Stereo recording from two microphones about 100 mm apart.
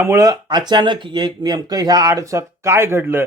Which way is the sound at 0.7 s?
50° right (ahead or behind).